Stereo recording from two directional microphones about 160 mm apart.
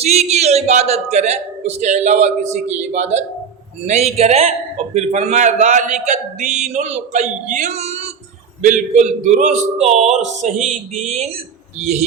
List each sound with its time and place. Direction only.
0.0 s a man's voice: 40° right (ahead or behind)